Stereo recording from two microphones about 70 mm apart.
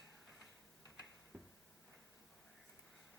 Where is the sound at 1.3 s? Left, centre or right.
Right.